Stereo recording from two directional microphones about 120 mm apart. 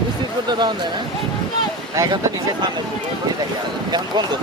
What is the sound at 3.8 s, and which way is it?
Speech, 35° right (ahead or behind).